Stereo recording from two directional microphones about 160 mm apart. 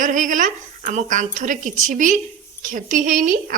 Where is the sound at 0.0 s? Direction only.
55° right (ahead or behind).